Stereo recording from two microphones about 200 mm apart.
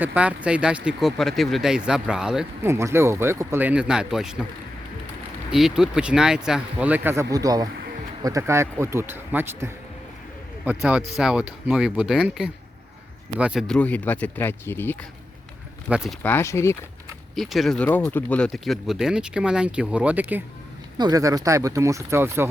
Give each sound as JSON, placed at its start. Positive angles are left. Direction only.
{"t": 0.0, "sound": "speech", "side_deg": -5}
{"t": 5.5, "sound": "a man's voice", "side_deg": 0}
{"t": 15.9, "sound": "a man's voice", "side_deg": -5}
{"t": 16.2, "sound": "speech", "side_deg": 10}
{"t": 17.3, "sound": "speech", "side_deg": 0}
{"t": 17.8, "sound": "a man's voice", "side_deg": 10}